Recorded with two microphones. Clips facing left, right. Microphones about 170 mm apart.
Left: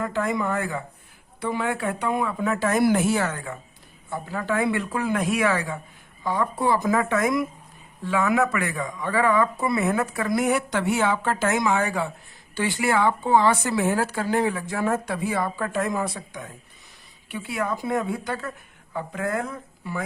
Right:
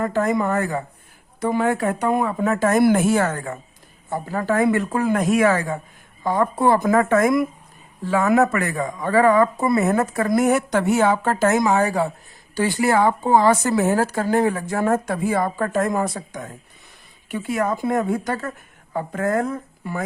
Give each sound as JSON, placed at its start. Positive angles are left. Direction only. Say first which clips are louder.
{"t": 0.0, "sound": "speech", "louder": "right 5 dB", "side_deg": -45}
{"t": 8.0, "sound": "speech", "louder": "right 5 dB", "side_deg": -40}